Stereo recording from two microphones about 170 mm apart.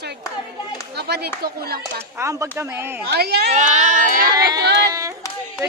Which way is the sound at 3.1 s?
70° right (ahead or behind).